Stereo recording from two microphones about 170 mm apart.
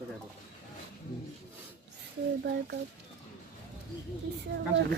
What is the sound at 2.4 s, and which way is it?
Child singing, 75° right (ahead or behind).